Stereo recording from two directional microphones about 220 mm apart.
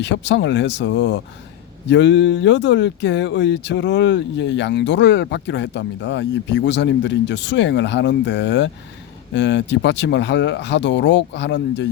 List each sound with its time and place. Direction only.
0.0 s speech: 55° left (ahead or behind)